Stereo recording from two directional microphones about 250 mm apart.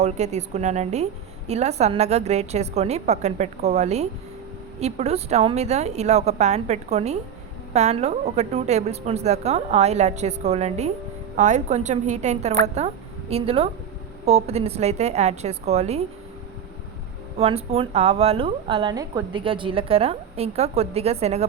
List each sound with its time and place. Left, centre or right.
0.0 s speech: right
17.3 s speech: right